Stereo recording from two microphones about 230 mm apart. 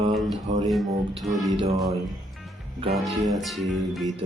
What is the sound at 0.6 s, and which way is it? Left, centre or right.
Speech, centre.